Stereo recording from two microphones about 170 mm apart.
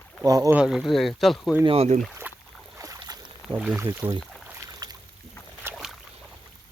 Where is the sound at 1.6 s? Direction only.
35° right (ahead or behind).